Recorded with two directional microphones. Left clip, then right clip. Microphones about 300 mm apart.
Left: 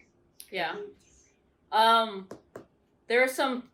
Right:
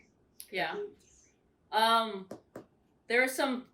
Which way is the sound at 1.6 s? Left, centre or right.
Centre.